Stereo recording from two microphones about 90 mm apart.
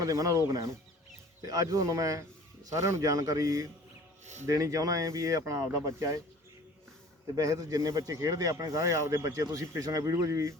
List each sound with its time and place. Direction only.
0.0 s speech: 40° right (ahead or behind)
7.3 s speech: 40° right (ahead or behind)